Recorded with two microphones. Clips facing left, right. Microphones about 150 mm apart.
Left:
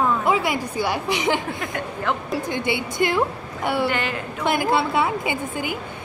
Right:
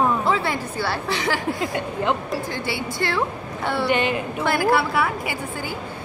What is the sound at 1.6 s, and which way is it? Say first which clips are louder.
Speech: right 3 dB; 20° right (ahead or behind).